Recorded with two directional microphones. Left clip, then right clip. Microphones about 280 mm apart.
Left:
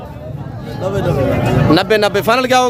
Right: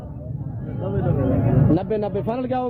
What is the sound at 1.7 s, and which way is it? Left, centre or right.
Speech, centre.